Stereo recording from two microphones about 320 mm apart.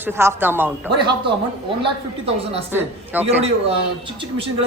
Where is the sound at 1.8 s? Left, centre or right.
Centre.